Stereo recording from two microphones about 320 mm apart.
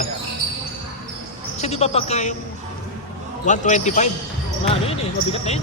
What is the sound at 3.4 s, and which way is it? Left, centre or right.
Speech, left.